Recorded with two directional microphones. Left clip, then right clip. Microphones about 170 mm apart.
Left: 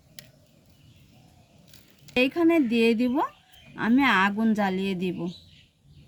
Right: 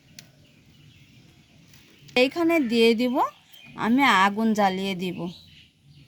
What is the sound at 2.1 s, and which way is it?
Speech, 35° right (ahead or behind).